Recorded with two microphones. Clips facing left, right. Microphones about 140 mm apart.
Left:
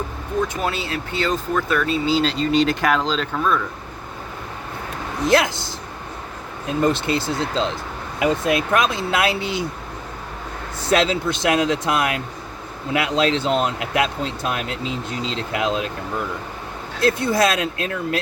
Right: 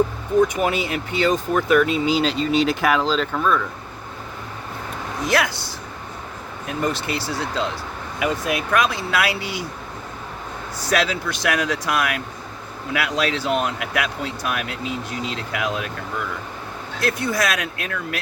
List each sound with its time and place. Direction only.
0.4 s speech: 15° right (ahead or behind); by 3.6 s centre (ahead or behind)
7.1 s speech: 20° left (ahead or behind)
10.8 s speech: 25° left (ahead or behind)